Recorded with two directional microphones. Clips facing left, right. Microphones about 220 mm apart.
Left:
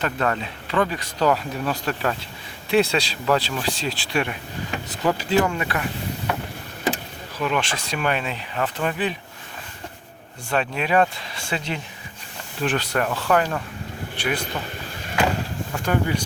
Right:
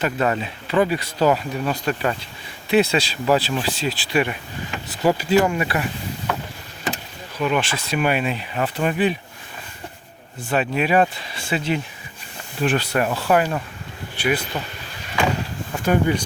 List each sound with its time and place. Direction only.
0.0 s speech: 10° right (ahead or behind)
7.3 s speech: 5° right (ahead or behind)
10.5 s speech: 5° right (ahead or behind)
15.9 s speech: 20° right (ahead or behind)